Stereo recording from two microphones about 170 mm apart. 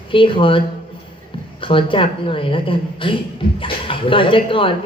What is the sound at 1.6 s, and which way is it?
A woman's voice, 30° left (ahead or behind).